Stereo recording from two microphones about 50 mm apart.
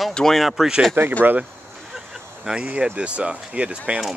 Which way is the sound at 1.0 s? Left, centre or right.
Right.